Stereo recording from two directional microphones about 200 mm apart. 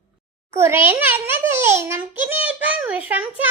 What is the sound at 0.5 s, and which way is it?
A child's voice, 10° right (ahead or behind).